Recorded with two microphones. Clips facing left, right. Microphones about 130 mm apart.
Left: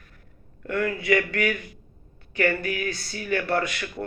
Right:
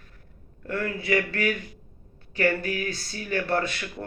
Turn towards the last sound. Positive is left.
turn(degrees=-30)  # may be behind; listen again after turning